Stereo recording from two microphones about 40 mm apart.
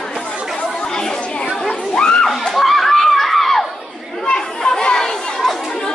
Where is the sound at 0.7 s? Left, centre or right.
Centre.